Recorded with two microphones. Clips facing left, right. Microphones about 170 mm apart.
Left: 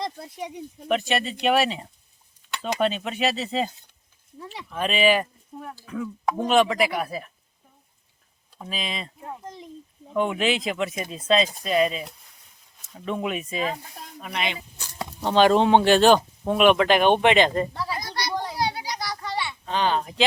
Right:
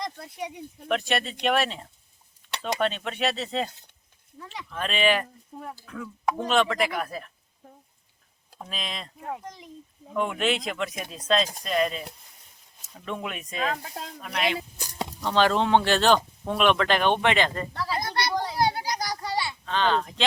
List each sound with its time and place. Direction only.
0.9 s speech: centre (ahead or behind)
4.7 s speech: 10° left (ahead or behind)
8.6 s speech: 5° left (ahead or behind)
10.2 s speech: centre (ahead or behind)
15.3 s speech: 15° left (ahead or behind)
18.0 s children playing: 55° right (ahead or behind)
18.5 s a sound: 45° right (ahead or behind)
19.6 s speech: 15° left (ahead or behind)